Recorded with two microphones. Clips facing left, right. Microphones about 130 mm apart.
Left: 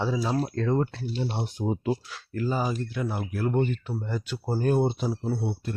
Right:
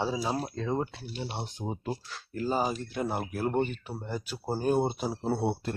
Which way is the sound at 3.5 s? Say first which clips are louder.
Left 3 dB; 15° right (ahead or behind).